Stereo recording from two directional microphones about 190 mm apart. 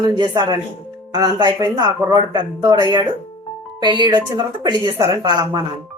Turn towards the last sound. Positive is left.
turn(degrees=-20)  # may be behind; listen again after turning